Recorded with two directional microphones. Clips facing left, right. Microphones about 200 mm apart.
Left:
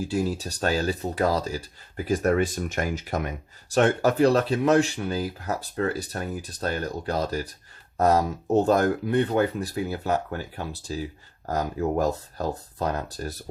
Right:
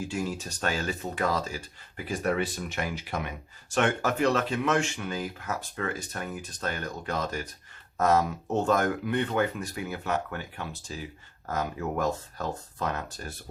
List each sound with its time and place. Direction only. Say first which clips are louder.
0.0 s speech: left 5 dB; 35° left (ahead or behind)